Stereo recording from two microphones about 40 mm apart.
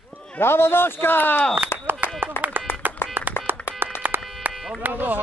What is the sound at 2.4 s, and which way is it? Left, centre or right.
Clapping, left.